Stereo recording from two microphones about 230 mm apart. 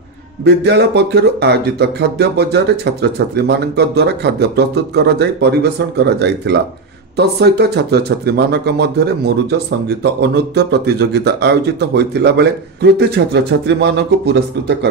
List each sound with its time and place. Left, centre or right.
0.4 s speech: right